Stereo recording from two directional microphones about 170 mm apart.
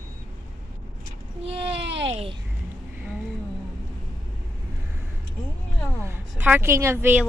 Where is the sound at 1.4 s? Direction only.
35° right (ahead or behind).